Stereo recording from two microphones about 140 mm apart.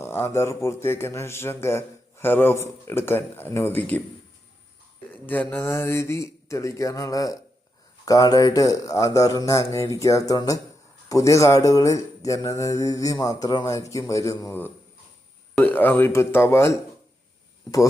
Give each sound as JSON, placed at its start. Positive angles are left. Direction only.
{"t": 0.0, "sound": "a man's voice", "side_deg": 15}
{"t": 5.2, "sound": "a man's voice", "side_deg": 15}